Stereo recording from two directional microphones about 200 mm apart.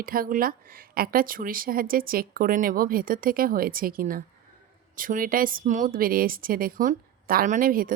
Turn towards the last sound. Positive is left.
turn(degrees=-45)  # may be behind; listen again after turning